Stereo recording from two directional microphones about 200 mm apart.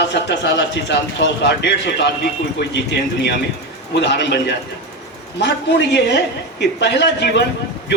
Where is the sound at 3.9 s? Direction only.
60° left (ahead or behind).